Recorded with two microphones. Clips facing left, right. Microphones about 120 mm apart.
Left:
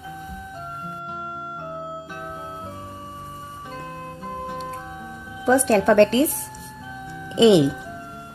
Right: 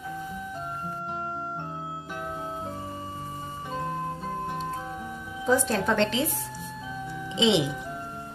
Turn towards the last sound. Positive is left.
turn(degrees=50)  # may be behind; listen again after turning